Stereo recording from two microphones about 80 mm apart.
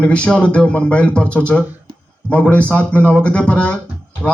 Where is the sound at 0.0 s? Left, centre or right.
Centre.